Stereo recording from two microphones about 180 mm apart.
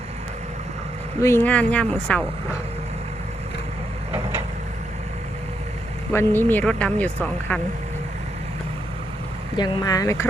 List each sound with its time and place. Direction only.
1.2 s speech: 15° left (ahead or behind)
6.1 s speech: 10° left (ahead or behind)
9.6 s speech: 25° left (ahead or behind)